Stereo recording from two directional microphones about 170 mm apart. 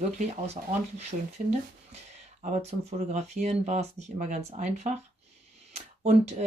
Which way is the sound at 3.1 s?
45° right (ahead or behind).